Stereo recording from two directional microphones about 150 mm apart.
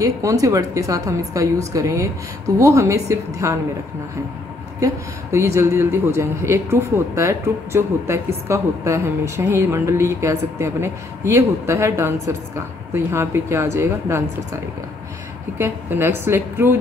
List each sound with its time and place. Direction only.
0.0 s a woman's voice: 20° right (ahead or behind)
4.7 s a man's voice: 20° right (ahead or behind)